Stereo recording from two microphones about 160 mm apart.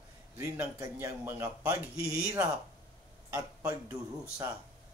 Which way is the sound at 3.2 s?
15° right (ahead or behind).